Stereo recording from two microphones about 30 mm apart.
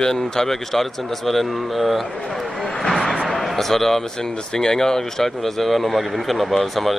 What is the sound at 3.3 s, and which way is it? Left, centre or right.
Basketball bounce, centre.